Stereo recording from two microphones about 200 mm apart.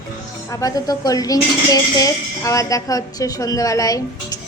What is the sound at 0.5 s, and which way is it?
A woman's voice, 15° left (ahead or behind).